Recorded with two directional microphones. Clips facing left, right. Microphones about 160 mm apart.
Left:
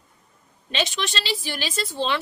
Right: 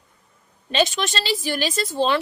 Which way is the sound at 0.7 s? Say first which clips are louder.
Right 5 dB; 45° right (ahead or behind).